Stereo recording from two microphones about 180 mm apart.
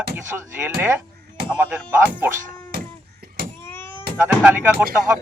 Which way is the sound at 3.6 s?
10° left (ahead or behind).